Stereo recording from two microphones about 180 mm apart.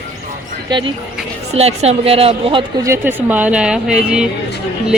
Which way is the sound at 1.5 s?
35° right (ahead or behind).